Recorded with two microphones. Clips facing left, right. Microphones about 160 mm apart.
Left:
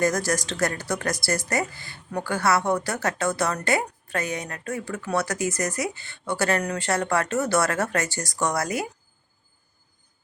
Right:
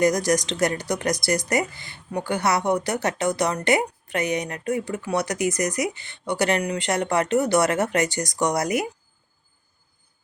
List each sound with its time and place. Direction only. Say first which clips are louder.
0.0 s speech: right 4 dB; 15° right (ahead or behind)